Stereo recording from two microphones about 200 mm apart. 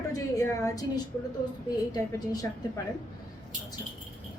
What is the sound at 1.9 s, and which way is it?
Speech, 20° left (ahead or behind).